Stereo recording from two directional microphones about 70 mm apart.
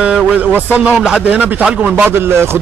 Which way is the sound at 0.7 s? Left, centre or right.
Centre.